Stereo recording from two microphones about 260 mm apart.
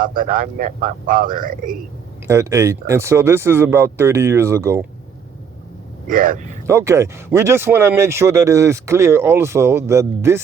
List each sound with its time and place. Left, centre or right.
0.0 s speech: right
2.2 s speech: centre
6.1 s speech: right
6.7 s speech: centre